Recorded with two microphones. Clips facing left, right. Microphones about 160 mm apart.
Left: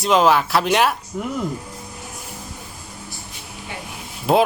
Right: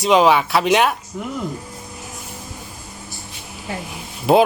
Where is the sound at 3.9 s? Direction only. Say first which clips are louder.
Right 3 dB; centre (ahead or behind).